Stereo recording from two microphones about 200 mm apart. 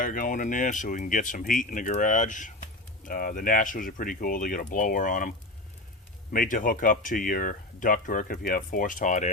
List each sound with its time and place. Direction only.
0.0 s speech: 40° left (ahead or behind)
6.3 s speech: 40° left (ahead or behind)